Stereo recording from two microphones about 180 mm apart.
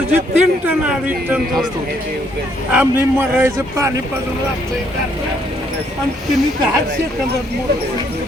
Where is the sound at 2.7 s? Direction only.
10° right (ahead or behind).